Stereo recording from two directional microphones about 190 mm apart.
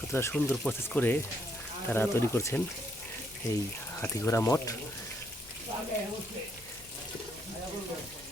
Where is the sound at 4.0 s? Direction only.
15° left (ahead or behind).